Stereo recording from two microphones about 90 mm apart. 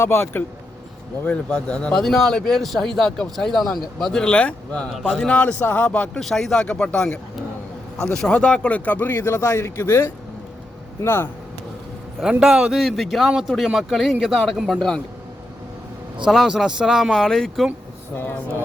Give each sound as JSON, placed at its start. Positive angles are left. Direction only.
{"t": 0.0, "sound": "speech", "side_deg": 25}
{"t": 1.2, "sound": "speech", "side_deg": 10}
{"t": 9.1, "sound": "speech", "side_deg": 35}
{"t": 12.2, "sound": "speech", "side_deg": -5}
{"t": 16.2, "sound": "a man's voice", "side_deg": -5}
{"t": 17.1, "sound": "speech", "side_deg": 5}
{"t": 18.2, "sound": "speech", "side_deg": 20}